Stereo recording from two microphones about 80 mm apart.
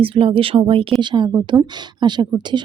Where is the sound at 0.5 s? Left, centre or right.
Right.